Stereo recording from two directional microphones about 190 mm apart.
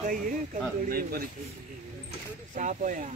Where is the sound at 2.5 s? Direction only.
40° right (ahead or behind).